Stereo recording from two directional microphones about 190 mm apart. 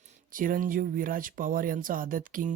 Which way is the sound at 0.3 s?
45° right (ahead or behind).